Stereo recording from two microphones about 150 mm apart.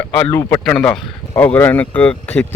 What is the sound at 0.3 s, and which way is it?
Speech, 15° left (ahead or behind).